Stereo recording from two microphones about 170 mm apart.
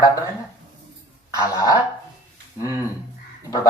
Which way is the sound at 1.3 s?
20° left (ahead or behind).